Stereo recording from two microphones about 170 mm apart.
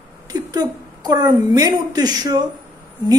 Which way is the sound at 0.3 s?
20° right (ahead or behind).